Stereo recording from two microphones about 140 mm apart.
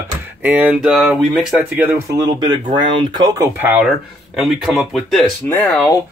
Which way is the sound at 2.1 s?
30° right (ahead or behind).